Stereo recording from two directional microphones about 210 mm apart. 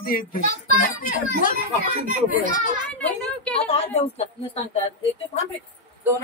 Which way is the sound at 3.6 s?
30° left (ahead or behind).